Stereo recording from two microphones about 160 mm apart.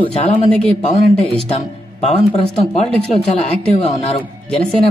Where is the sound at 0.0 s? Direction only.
35° left (ahead or behind).